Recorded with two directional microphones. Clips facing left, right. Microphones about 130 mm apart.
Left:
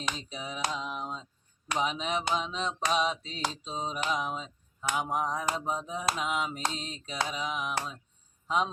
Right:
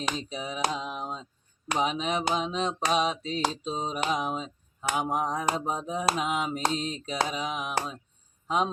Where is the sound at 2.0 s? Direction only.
60° right (ahead or behind).